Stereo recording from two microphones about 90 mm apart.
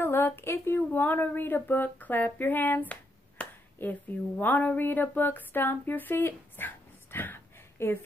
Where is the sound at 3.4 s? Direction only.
15° left (ahead or behind).